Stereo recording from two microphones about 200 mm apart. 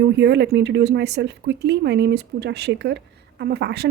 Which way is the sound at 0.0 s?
60° right (ahead or behind).